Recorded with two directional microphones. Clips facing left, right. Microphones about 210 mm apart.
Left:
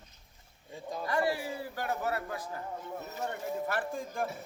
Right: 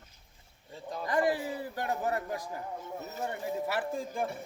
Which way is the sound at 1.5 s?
20° right (ahead or behind).